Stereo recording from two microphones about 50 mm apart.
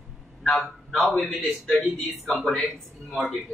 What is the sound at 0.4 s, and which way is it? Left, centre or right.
A man's voice, centre.